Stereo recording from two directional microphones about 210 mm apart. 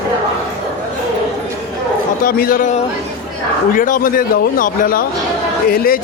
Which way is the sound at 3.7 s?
40° left (ahead or behind).